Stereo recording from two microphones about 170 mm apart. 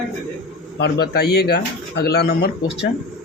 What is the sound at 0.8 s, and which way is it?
Speech, 70° left (ahead or behind).